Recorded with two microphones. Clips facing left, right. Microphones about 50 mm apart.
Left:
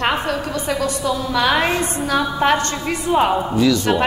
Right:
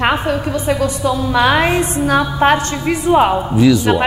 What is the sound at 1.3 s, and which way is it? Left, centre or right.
Speech, right.